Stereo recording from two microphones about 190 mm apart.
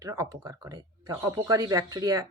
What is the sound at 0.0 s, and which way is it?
Speech, 15° right (ahead or behind).